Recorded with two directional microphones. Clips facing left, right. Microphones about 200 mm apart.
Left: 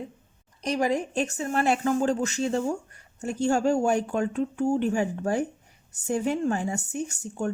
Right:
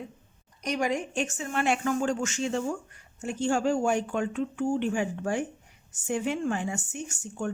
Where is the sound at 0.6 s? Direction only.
35° left (ahead or behind).